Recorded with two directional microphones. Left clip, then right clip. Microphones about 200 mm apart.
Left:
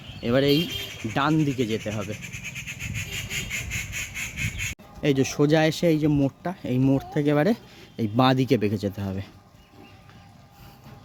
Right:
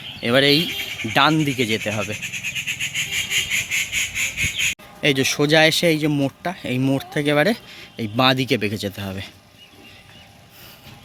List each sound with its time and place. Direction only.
0.2 s speech: centre (ahead or behind)
2.4 s squeal: 55° left (ahead or behind)
4.9 s speech: 10° left (ahead or behind)